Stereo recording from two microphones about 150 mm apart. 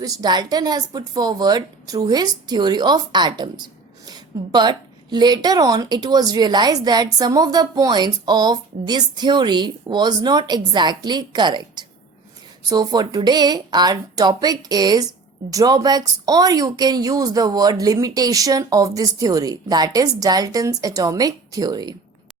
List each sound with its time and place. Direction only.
0.0 s a woman's voice: 25° right (ahead or behind)